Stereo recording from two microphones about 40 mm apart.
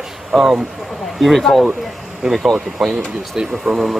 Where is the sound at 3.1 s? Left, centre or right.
Centre.